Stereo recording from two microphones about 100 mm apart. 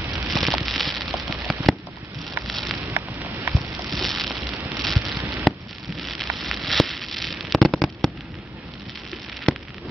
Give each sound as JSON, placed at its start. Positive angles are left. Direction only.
{"t": 0.3, "sound": "fireworks", "side_deg": 0}
{"t": 2.4, "sound": "rain on surface", "side_deg": 0}
{"t": 2.9, "sound": "rain on surface", "side_deg": -20}
{"t": 3.5, "sound": "a sound", "side_deg": 0}
{"t": 4.7, "sound": "rain", "side_deg": 0}
{"t": 5.5, "sound": "a sound", "side_deg": -5}
{"t": 5.9, "sound": "fireworks", "side_deg": 0}